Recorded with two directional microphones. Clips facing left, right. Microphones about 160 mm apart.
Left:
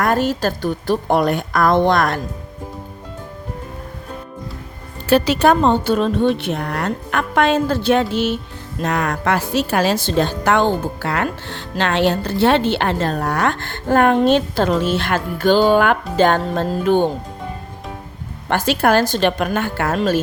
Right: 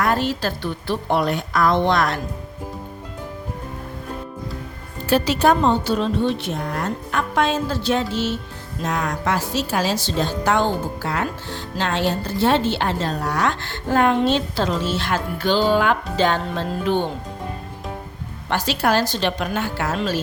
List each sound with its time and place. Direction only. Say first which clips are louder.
0.0 s a woman's voice: left 3 dB; 45° left (ahead or behind)
5.0 s a woman's voice: left 3 dB; 70° left (ahead or behind); by 17.1 s 50° left (ahead or behind)
18.4 s a woman's voice: left 4 dB; 55° left (ahead or behind)